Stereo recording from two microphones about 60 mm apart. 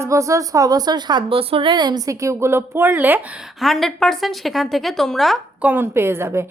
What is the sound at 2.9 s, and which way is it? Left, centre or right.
Speech, right.